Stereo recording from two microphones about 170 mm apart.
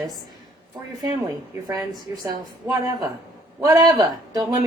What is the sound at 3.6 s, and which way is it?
A man's voice, 20° right (ahead or behind).